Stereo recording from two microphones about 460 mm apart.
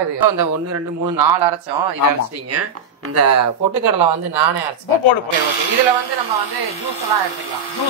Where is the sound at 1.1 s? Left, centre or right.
Right.